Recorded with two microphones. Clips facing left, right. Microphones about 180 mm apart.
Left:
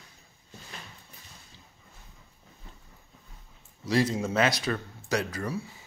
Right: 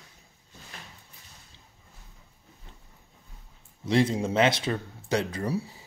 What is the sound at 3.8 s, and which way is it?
Speech, 25° right (ahead or behind).